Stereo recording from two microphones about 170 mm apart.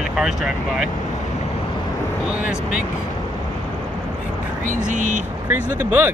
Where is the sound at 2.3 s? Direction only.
5° right (ahead or behind).